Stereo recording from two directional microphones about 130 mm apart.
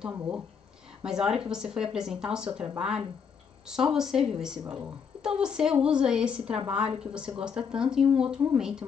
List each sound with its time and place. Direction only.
0.1 s a woman's voice: 10° right (ahead or behind)